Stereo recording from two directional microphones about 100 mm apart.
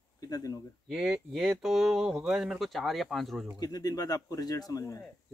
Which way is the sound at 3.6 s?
40° left (ahead or behind).